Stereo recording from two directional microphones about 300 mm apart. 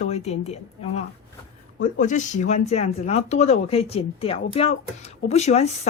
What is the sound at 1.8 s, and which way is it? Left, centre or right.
Speech, left.